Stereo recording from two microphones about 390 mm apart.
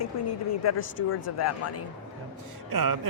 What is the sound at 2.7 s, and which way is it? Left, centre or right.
Speech, right.